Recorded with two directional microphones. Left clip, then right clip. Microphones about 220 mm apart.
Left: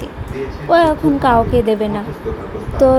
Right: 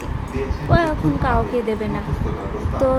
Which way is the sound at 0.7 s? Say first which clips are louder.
Left 8 dB; 20° left (ahead or behind).